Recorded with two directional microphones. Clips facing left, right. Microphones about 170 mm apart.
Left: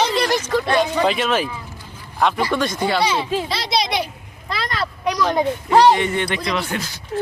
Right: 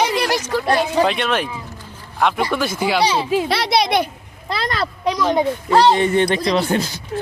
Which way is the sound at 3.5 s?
60° right (ahead or behind).